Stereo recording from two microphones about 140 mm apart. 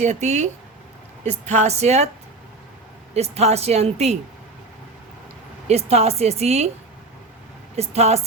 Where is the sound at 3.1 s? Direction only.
50° right (ahead or behind).